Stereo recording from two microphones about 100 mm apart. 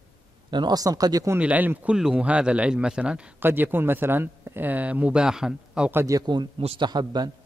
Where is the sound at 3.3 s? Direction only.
20° right (ahead or behind).